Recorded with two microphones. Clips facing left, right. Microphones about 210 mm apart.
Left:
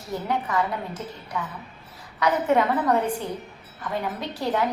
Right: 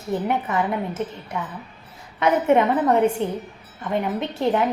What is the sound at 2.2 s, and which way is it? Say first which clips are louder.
A woman's voice: right 4 dB; 25° right (ahead or behind).